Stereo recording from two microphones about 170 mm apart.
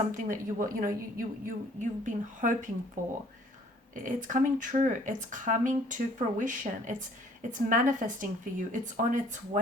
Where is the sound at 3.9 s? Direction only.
50° right (ahead or behind).